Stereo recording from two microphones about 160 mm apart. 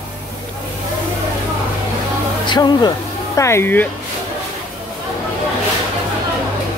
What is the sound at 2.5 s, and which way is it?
Speech, 25° left (ahead or behind).